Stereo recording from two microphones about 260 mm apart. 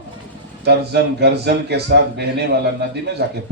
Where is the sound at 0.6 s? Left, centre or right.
Right.